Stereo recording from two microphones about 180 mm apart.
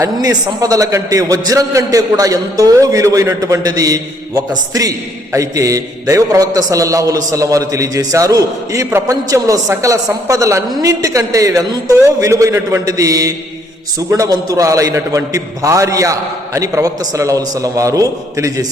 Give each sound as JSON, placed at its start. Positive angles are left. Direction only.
{"t": 0.0, "sound": "a man's voice", "side_deg": -20}